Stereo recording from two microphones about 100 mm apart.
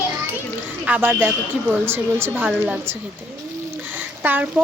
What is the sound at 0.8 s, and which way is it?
A woman's voice, 15° right (ahead or behind).